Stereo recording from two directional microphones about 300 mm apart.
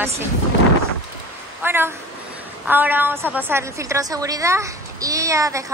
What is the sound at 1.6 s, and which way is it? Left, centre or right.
A woman's voice, centre.